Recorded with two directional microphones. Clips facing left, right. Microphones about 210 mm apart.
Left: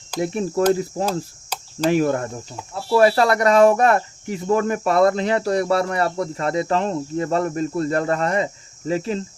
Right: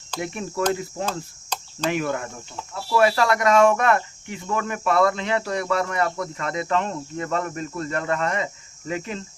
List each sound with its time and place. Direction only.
0.2 s speech: 35° left (ahead or behind)